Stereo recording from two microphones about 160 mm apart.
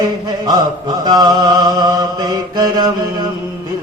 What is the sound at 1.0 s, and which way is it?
Chant, 25° right (ahead or behind).